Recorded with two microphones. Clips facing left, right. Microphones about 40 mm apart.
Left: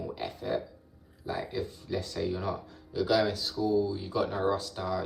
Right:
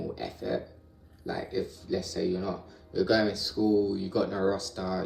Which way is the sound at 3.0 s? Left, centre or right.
Centre.